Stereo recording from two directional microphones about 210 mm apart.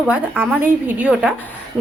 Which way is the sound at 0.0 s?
10° right (ahead or behind).